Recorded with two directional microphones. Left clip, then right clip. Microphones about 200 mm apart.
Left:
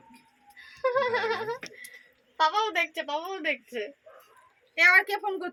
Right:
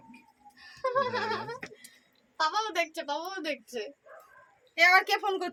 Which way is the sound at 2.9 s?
30° left (ahead or behind).